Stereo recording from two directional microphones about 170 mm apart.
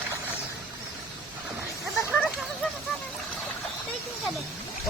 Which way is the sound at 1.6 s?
10° right (ahead or behind).